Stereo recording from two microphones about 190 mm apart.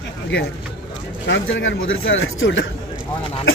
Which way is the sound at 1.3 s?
80° left.